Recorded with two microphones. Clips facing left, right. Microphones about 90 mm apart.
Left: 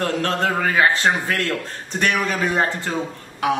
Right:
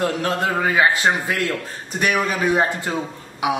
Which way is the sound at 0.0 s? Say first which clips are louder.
Even; 10° right (ahead or behind).